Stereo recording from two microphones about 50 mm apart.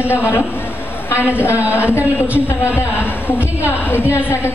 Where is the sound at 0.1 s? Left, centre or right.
Left.